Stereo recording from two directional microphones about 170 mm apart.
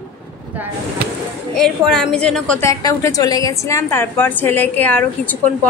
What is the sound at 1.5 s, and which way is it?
A woman's voice, centre (ahead or behind).